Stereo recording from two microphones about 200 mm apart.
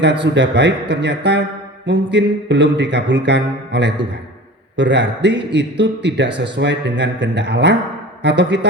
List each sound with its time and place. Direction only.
0.0 s a man's voice: 60° right (ahead or behind)